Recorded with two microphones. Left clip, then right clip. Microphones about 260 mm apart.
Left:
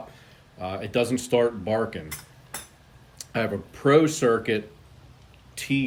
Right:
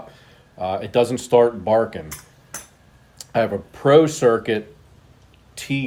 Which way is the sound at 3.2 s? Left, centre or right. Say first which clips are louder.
Right 7 dB; centre.